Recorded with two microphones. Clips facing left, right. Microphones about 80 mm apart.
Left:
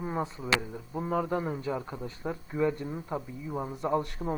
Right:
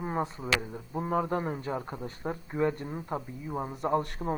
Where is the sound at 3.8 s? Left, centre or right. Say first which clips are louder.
Right 1 dB; right.